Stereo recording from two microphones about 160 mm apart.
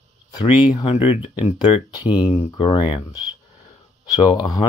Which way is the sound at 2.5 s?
35° left (ahead or behind).